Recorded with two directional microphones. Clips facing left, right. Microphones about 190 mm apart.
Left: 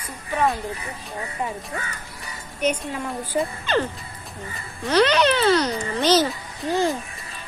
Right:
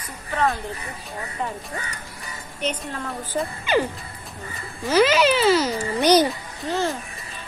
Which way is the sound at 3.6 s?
10° right (ahead or behind).